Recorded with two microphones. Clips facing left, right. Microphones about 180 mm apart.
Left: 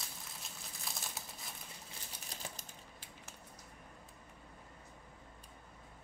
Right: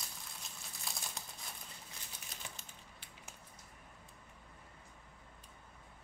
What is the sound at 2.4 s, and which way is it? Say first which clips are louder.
Typewriter: left 4 dB; 40° left (ahead or behind).